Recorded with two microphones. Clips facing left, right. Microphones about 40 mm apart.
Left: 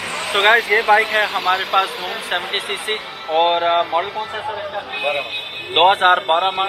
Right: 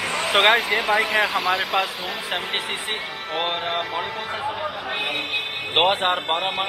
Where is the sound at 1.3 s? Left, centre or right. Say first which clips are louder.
Left 4 dB; centre.